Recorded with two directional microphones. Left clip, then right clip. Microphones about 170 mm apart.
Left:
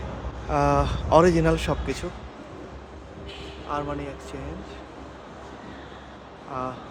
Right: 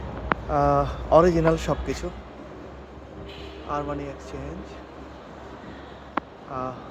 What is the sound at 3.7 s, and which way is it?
Speech, 10° left (ahead or behind).